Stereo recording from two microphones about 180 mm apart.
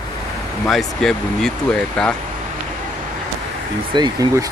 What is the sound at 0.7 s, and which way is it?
Speech, centre (ahead or behind).